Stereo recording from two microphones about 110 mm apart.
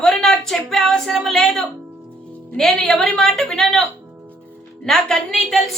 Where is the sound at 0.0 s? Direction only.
5° left (ahead or behind).